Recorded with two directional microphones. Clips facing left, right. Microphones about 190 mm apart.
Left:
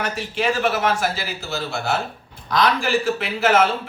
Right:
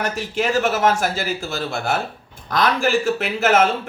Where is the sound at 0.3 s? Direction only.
45° right (ahead or behind).